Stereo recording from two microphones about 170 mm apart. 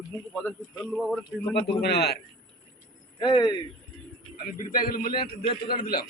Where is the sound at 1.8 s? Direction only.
70° left (ahead or behind).